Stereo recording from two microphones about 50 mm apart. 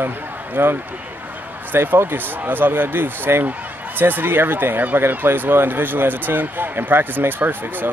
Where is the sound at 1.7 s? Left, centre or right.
Right.